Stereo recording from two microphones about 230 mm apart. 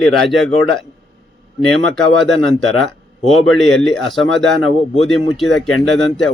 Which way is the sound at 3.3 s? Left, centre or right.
Centre.